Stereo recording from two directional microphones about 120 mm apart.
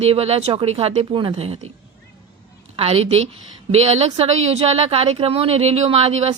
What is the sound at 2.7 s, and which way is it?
A woman's voice, 55° right (ahead or behind).